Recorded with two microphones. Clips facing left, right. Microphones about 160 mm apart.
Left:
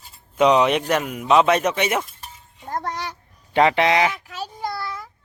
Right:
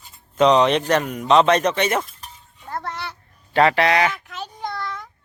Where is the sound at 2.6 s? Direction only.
40° left (ahead or behind).